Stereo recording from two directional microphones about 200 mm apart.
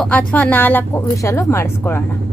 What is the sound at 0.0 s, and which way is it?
Speech, 5° left (ahead or behind).